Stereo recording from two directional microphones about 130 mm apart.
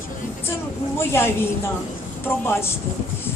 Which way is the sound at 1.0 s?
20° left (ahead or behind).